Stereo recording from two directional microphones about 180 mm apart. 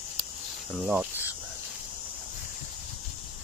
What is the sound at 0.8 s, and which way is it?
Speech, 10° right (ahead or behind).